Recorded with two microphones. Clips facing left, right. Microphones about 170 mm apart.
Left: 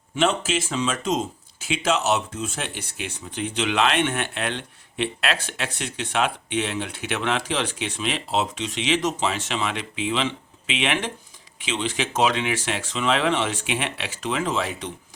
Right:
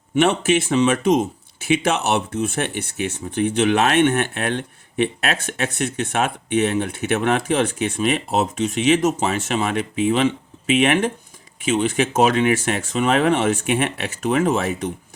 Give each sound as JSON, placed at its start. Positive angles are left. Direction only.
{"t": 0.2, "sound": "speech", "side_deg": -65}